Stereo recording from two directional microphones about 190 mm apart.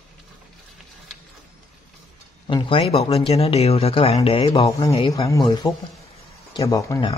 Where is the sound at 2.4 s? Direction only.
25° left (ahead or behind).